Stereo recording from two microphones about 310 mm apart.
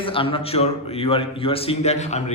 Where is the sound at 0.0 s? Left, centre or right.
Centre.